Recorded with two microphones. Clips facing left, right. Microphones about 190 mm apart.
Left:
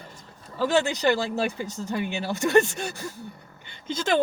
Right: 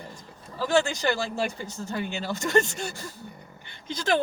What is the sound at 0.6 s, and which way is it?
Speech, 20° left (ahead or behind).